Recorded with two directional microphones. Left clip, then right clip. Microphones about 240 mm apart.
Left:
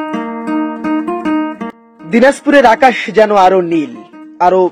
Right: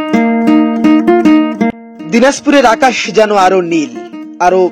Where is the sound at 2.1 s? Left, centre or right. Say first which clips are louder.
Even; centre.